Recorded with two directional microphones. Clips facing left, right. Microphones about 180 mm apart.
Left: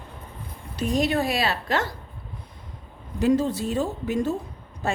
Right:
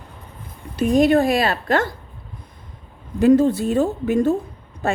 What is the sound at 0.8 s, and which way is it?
A woman's voice, 55° right (ahead or behind).